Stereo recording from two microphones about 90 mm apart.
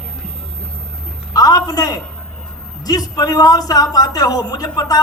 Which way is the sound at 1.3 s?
45° left (ahead or behind).